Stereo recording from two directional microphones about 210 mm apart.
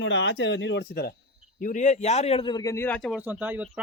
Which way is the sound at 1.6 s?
35° left (ahead or behind).